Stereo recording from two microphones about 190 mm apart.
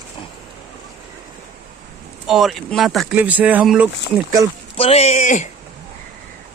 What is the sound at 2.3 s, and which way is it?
Speech, centre (ahead or behind).